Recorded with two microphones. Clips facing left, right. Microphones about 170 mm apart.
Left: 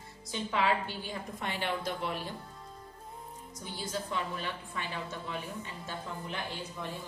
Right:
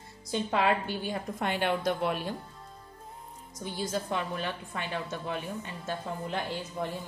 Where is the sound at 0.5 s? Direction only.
50° right (ahead or behind).